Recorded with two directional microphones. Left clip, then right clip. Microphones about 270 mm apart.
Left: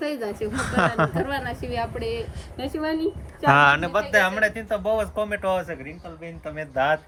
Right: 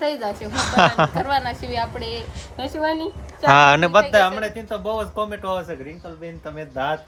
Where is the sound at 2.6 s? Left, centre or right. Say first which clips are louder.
Right 5 dB; right.